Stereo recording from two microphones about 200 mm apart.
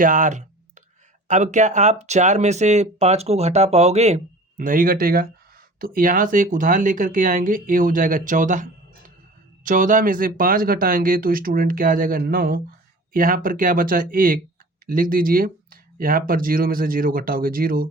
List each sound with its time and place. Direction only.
0.0 s speech: 40° right (ahead or behind)
9.6 s speech: 40° right (ahead or behind)